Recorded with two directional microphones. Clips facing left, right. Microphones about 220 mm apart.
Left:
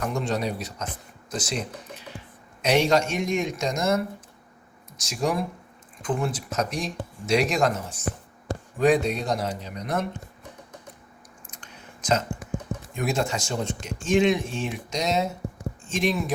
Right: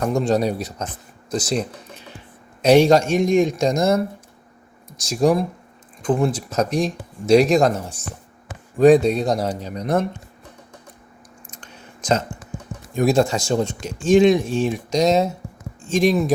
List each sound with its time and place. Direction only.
0.1 s speech: 40° right (ahead or behind)
5.0 s speech: 35° right (ahead or behind)
12.9 s speech: 35° right (ahead or behind)